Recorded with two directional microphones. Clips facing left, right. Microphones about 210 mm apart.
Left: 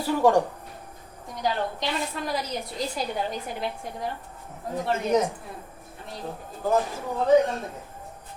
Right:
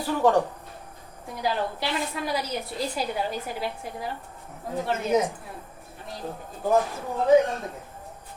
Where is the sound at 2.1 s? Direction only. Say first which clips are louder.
Right 1 dB; 5° right (ahead or behind).